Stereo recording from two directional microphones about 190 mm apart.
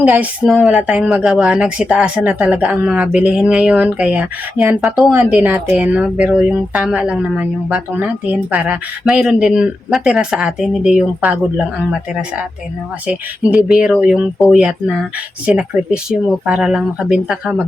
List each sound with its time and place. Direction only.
0.0 s speech: 10° right (ahead or behind)
13.7 s speech: 5° right (ahead or behind)